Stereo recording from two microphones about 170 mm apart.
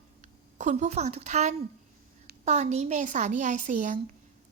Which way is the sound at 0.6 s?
45° right (ahead or behind).